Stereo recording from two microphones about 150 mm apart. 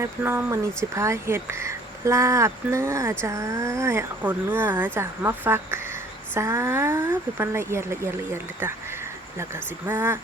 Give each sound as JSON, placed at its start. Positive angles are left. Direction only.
{"t": 0.0, "sound": "speech", "side_deg": -15}